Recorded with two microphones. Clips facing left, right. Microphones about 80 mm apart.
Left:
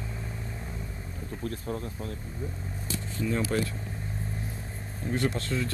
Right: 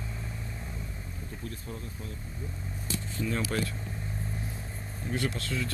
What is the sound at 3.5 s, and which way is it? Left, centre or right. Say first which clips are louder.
Speech: left 3 dB; centre.